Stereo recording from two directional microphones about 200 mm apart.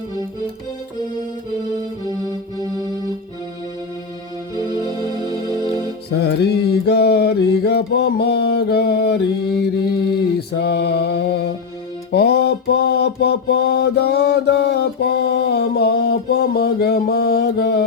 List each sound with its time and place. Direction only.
5.5 s music: 20° left (ahead or behind)
6.1 s mantra: 55° left (ahead or behind)
10.3 s mantra: 55° left (ahead or behind)